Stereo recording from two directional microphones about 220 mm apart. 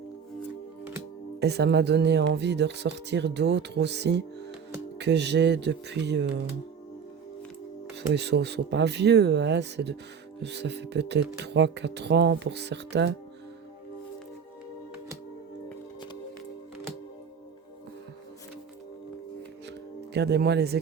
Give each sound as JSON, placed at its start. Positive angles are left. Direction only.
{"t": 1.4, "sound": "speech", "side_deg": -50}
{"t": 8.1, "sound": "speech", "side_deg": -50}
{"t": 20.1, "sound": "speech", "side_deg": -50}